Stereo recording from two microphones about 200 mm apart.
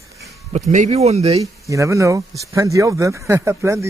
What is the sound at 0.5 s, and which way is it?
Speech, 35° right (ahead or behind).